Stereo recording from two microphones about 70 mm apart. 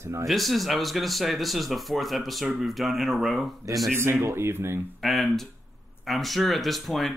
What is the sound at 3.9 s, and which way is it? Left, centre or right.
Speech, right.